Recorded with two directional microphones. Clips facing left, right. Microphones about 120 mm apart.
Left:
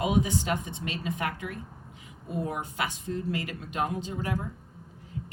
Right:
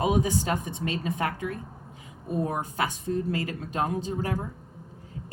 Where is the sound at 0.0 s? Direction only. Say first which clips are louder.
Right 2 dB; 35° right (ahead or behind).